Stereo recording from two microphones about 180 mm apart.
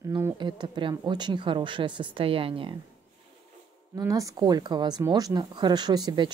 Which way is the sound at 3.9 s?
20° right (ahead or behind).